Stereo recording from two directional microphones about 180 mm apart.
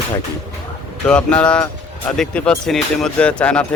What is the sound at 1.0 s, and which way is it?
Speech, 5° left (ahead or behind).